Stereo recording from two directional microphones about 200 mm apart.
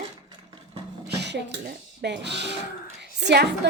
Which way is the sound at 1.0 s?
55° right (ahead or behind).